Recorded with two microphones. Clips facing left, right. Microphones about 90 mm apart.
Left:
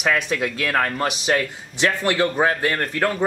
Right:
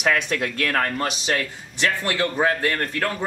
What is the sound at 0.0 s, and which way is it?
Speech, 15° left (ahead or behind).